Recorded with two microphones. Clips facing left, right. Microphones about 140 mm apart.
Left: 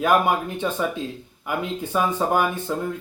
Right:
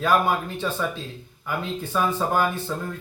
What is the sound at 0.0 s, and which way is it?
Speech, 15° left (ahead or behind).